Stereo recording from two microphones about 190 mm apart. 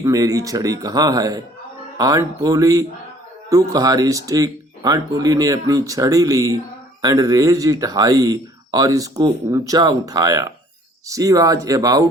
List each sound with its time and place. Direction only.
0.0 s speech: 20° right (ahead or behind)